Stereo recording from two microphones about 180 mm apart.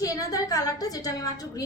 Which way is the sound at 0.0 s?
20° left (ahead or behind).